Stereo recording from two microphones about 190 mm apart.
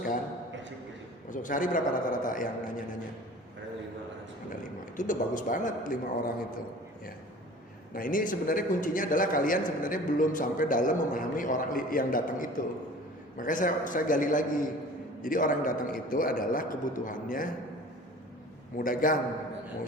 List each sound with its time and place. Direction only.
1.3 s a man's voice: 45° left (ahead or behind)
4.9 s a man's voice: 45° left (ahead or behind)
7.9 s a man's voice: 45° left (ahead or behind)
18.8 s a man's voice: 45° left (ahead or behind)